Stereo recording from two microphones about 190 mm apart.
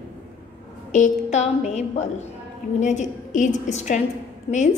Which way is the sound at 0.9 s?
40° left (ahead or behind).